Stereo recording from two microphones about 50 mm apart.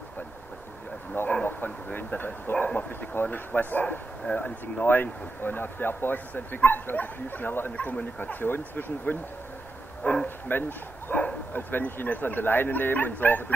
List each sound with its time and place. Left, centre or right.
1.2 s a sound: left
2.0 s speech: left
4.3 s speech: left
4.8 s speech: left
7.9 s speech: left
10.0 s bow-wow: left
10.5 s speech: left
11.1 s bow-wow: left
11.5 s speech: left